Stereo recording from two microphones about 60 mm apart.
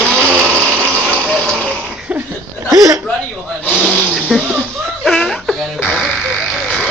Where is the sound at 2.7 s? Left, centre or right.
Right.